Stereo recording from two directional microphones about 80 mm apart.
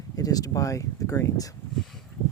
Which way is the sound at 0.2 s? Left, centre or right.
Left.